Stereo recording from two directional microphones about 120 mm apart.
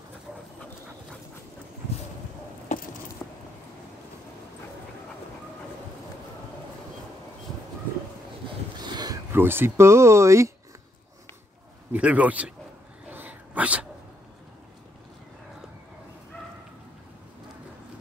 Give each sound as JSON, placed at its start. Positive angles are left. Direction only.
{"t": 2.7, "sound": "coin", "side_deg": 80}
{"t": 3.2, "sound": "a sound", "side_deg": 10}
{"t": 8.5, "sound": "a sound", "side_deg": -35}
{"t": 9.3, "sound": "speech", "side_deg": -20}
{"t": 11.9, "sound": "a man's voice", "side_deg": -10}
{"t": 13.1, "sound": "dog", "side_deg": -15}